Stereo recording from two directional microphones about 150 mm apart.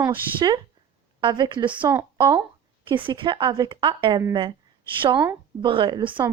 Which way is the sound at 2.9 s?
35° right (ahead or behind).